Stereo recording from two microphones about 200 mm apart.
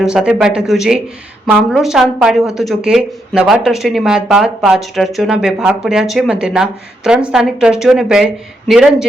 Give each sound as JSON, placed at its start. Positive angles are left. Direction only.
{"t": 0.0, "sound": "a woman's voice", "side_deg": -5}